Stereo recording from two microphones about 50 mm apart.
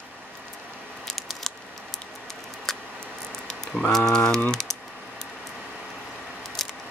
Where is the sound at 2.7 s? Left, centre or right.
Centre.